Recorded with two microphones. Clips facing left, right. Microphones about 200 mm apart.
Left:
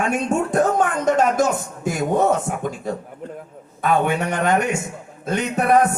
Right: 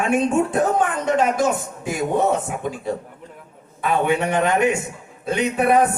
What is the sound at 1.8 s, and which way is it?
Speech, 45° left (ahead or behind).